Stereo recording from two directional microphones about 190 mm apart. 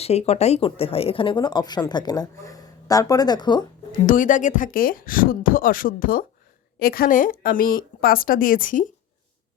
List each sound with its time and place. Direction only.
0.0 s speech: 35° left (ahead or behind)
4.0 s speech: 45° left (ahead or behind)